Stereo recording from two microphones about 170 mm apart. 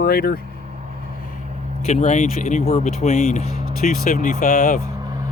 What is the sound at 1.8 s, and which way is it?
Speech, 40° left (ahead or behind).